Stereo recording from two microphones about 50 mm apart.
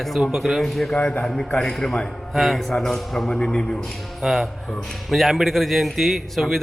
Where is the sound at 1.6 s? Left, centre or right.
Centre.